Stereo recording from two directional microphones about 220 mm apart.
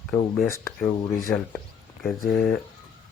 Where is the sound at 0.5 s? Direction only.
15° left (ahead or behind).